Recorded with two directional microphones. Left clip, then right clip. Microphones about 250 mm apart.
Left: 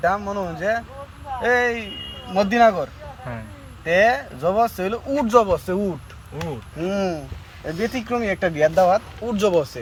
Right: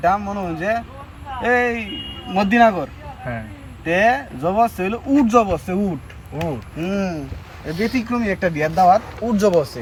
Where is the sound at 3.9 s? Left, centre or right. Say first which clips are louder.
Even; centre.